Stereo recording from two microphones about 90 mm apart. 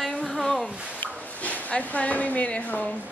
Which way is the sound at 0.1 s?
10° left (ahead or behind).